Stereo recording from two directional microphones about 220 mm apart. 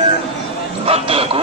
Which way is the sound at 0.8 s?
25° right (ahead or behind).